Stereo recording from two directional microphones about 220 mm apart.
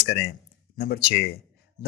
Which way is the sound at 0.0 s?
45° left (ahead or behind).